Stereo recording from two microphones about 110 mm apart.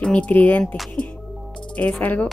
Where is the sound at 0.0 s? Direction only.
10° left (ahead or behind).